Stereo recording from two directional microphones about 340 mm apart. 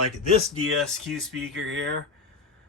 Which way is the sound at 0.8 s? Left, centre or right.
Centre.